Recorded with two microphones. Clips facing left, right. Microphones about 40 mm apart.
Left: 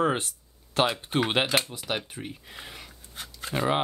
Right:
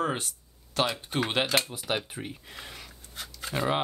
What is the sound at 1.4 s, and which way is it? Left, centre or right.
Speech, centre.